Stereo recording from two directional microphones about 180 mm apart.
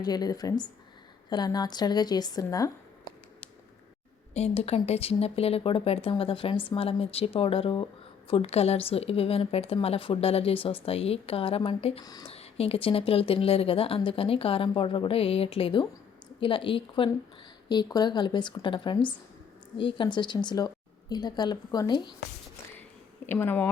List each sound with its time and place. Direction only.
0.0 s a woman's voice: 20° left (ahead or behind)
4.4 s speech: 35° left (ahead or behind)
12.0 s a woman's voice: 20° left (ahead or behind)
12.3 s a woman's voice: 35° left (ahead or behind)
23.3 s speech: 10° left (ahead or behind)